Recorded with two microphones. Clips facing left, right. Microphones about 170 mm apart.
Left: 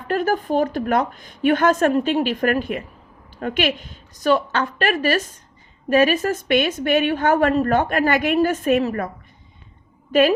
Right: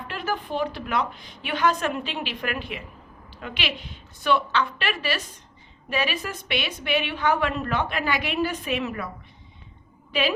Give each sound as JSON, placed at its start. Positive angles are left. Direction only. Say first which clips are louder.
{"t": 0.1, "sound": "a woman's voice", "louder": "left 10 dB", "side_deg": 45}
{"t": 10.1, "sound": "a woman's voice", "louder": "left 9 dB", "side_deg": 50}